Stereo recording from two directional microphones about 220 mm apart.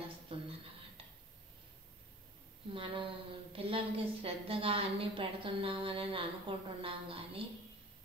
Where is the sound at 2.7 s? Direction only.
25° right (ahead or behind).